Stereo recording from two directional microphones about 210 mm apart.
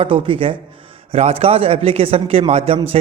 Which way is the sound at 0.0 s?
25° right (ahead or behind).